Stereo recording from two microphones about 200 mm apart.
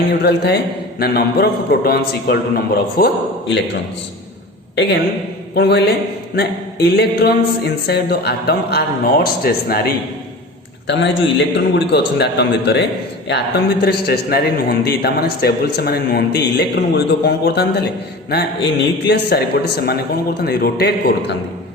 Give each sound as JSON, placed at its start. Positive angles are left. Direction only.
{"t": 0.1, "sound": "a man's voice", "side_deg": 55}
{"t": 4.7, "sound": "a man's voice", "side_deg": 60}
{"t": 10.8, "sound": "a man's voice", "side_deg": 60}